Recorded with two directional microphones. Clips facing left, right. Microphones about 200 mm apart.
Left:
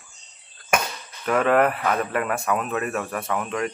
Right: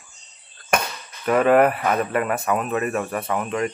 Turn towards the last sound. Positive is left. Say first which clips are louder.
# right 2 dB
turn(degrees=-5)  # may be behind; listen again after turning